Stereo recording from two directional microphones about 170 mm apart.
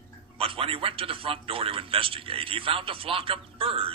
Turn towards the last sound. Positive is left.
turn(degrees=-30)  # may be behind; listen again after turning